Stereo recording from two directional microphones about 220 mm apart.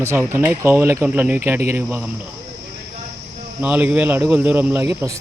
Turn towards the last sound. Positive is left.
turn(degrees=-10)  # may be behind; listen again after turning